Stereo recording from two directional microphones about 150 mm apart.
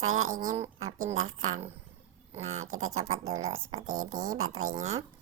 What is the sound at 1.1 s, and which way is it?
Speech, 55° right (ahead or behind).